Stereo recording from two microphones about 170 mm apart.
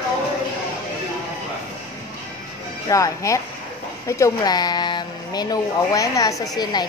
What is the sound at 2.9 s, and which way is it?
Speech, 20° left (ahead or behind).